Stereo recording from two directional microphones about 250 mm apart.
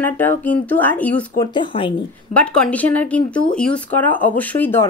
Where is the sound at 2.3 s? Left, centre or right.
Centre.